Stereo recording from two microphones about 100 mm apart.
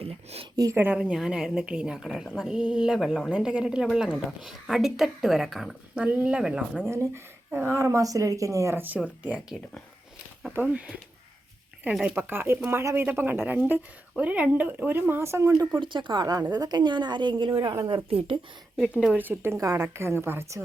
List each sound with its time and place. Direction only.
0.0 s a sound: 75° right (ahead or behind)
0.5 s speech: 35° right (ahead or behind)
0.9 s a woman's voice: 5° right (ahead or behind)
6.8 s a woman's voice: 25° right (ahead or behind)
12.1 s a woman's voice: 20° right (ahead or behind)
15.7 s a woman's voice: 55° right (ahead or behind)
17.5 s speech: 60° right (ahead or behind)
18.8 s speech: 5° right (ahead or behind)
19.1 s a woman's voice: 20° right (ahead or behind)